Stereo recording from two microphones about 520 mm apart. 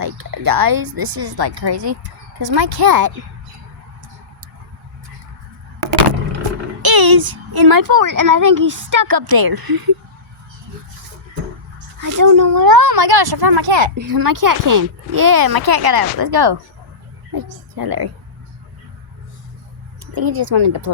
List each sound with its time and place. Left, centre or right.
0.0 s a child's voice: right
6.8 s a child's voice: right
11.9 s speech: right
13.9 s a child's voice: right
20.1 s a child's voice: right